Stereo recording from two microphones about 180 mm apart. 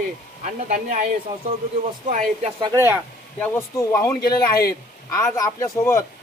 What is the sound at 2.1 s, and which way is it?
Speech, 35° right (ahead or behind).